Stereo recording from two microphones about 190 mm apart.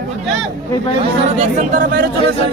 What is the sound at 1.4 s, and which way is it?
Speech, 45° right (ahead or behind).